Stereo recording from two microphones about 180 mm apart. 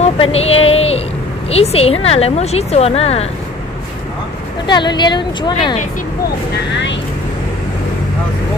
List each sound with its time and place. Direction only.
0.0 s a sound: 35° left (ahead or behind)
1.5 s speech: 35° left (ahead or behind)
4.6 s speech: 25° left (ahead or behind)